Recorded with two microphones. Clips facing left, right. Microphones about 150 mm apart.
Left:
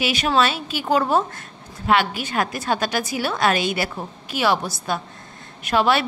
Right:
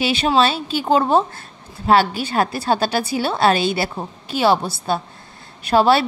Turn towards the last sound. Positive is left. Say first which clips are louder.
# right 4 dB
turn(degrees=-30)  # may be behind; listen again after turning